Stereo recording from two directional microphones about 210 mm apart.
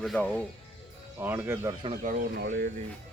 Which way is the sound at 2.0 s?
40° right (ahead or behind).